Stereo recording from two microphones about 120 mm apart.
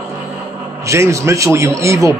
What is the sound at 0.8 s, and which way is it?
A man's voice, 25° right (ahead or behind).